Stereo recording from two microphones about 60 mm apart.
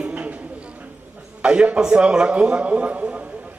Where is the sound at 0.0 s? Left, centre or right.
Right.